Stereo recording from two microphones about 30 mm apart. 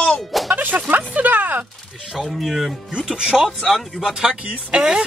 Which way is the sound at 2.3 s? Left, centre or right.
Centre.